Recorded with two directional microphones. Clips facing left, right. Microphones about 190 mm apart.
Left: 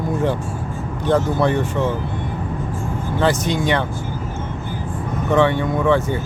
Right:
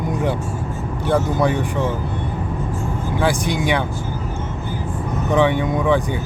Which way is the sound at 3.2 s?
10° right (ahead or behind).